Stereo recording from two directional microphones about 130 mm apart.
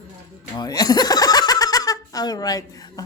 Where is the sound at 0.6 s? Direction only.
30° left (ahead or behind).